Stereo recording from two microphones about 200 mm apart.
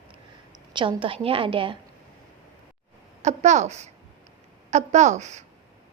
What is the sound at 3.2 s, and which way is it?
A woman's voice, 35° right (ahead or behind).